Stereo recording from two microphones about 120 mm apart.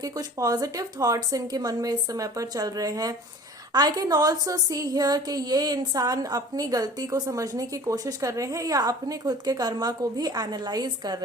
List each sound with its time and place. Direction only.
0.0 s a woman's voice: 30° right (ahead or behind)